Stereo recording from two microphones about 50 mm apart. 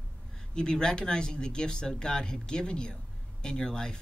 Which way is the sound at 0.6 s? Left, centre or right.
Centre.